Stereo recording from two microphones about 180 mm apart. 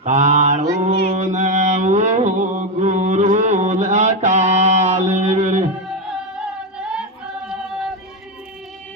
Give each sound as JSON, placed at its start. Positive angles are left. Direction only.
{"t": 0.0, "sound": "mantra", "side_deg": -40}
{"t": 5.9, "sound": "music", "side_deg": -5}